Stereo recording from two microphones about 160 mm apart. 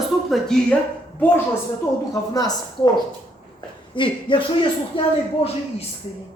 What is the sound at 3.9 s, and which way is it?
Speech, 30° left (ahead or behind).